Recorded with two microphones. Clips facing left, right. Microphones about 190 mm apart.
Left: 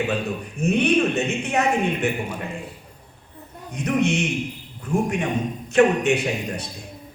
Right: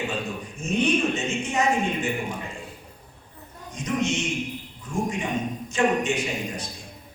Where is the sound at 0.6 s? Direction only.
60° left (ahead or behind).